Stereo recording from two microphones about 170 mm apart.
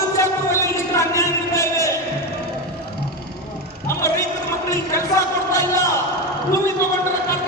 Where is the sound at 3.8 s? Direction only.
20° left (ahead or behind).